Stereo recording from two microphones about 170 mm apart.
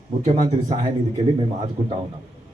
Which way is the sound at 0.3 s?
45° right (ahead or behind).